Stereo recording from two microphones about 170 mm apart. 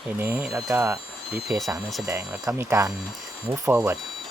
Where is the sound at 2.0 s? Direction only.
20° right (ahead or behind).